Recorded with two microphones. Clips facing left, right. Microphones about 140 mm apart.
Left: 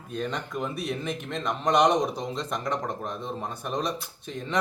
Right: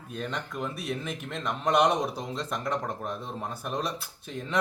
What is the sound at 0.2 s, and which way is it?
A man's voice, centre (ahead or behind).